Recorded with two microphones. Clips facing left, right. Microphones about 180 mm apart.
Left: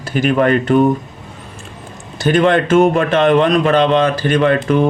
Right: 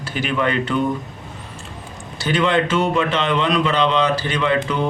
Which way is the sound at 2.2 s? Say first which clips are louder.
Left 6 dB; 50° left (ahead or behind).